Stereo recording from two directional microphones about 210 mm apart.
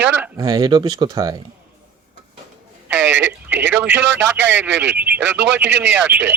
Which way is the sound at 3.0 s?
60° right (ahead or behind).